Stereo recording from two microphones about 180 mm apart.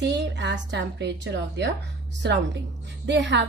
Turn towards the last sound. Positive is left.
turn(degrees=-80)